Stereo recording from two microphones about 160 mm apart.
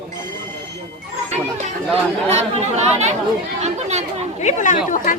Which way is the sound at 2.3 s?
45° right (ahead or behind).